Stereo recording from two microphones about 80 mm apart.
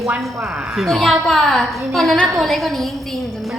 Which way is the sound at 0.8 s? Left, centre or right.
Centre.